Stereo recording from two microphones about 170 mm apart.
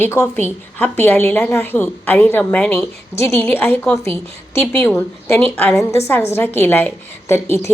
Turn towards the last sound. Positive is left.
turn(degrees=15)  # may be behind; listen again after turning